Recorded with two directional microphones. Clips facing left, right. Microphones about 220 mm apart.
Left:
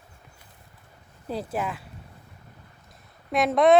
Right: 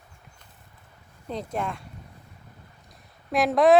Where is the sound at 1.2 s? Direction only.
5° left (ahead or behind).